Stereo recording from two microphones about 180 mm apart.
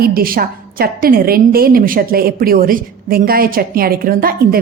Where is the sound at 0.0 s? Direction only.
55° right (ahead or behind).